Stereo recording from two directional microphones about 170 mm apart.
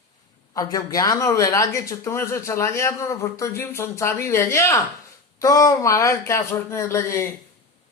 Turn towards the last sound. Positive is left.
turn(degrees=15)  # may be behind; listen again after turning